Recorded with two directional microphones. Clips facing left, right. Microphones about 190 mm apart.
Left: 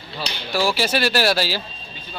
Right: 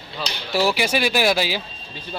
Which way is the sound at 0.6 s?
15° right (ahead or behind).